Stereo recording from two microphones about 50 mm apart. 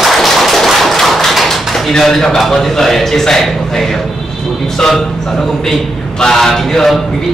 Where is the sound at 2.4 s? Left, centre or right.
Centre.